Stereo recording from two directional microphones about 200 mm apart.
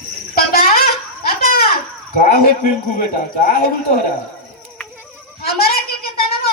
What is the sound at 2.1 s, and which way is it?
A man's voice, 45° left (ahead or behind).